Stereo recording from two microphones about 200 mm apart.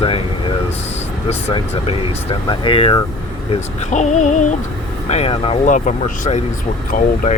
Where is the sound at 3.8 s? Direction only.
35° left (ahead or behind).